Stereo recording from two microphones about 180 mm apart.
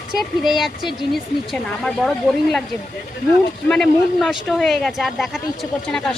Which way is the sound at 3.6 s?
5° left (ahead or behind).